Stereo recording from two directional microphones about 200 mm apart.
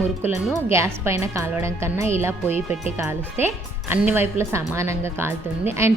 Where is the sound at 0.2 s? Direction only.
10° right (ahead or behind).